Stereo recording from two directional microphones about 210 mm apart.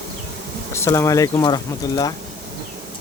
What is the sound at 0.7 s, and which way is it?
Speech, 15° left (ahead or behind).